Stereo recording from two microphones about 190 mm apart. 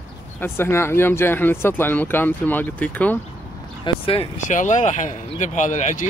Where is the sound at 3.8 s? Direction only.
30° left (ahead or behind).